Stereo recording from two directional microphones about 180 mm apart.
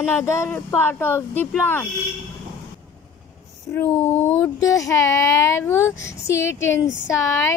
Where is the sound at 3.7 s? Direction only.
10° left (ahead or behind).